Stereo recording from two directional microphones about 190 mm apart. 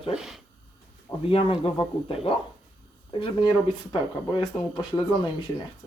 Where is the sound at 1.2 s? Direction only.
30° left (ahead or behind).